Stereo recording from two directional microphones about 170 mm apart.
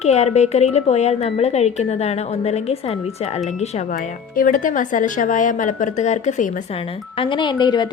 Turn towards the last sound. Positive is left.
turn(degrees=25)  # may be behind; listen again after turning